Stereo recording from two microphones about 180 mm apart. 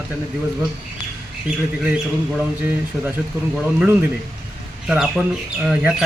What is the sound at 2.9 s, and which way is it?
Speech, centre (ahead or behind).